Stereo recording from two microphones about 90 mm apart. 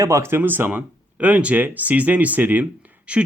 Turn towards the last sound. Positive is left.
turn(degrees=-15)  # may be behind; listen again after turning